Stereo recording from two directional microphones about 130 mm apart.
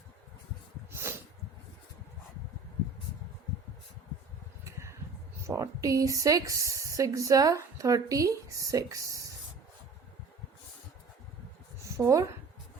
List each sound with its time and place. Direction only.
4.6 s a sound: 20° right (ahead or behind)
5.5 s a woman's voice: 25° right (ahead or behind)
11.9 s a woman's voice: 25° right (ahead or behind)